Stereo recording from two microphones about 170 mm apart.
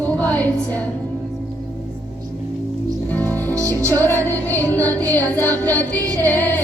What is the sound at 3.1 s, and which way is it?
Music, 10° left (ahead or behind).